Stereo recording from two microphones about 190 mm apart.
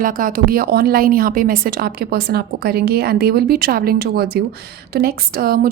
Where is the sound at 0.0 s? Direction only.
45° right (ahead or behind).